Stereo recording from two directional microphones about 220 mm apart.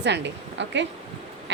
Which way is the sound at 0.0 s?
50° right (ahead or behind).